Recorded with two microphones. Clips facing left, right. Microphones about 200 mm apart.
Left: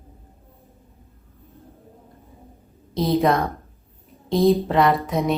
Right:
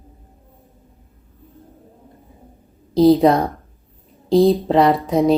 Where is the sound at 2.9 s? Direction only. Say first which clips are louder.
Right 7 dB; 30° right (ahead or behind).